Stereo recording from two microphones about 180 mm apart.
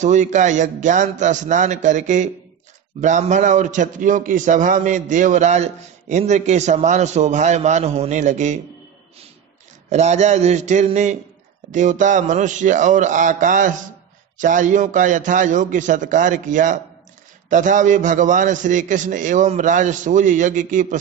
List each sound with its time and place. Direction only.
0.0 s a man's voice: 40° right (ahead or behind)
9.8 s a man's voice: 40° right (ahead or behind)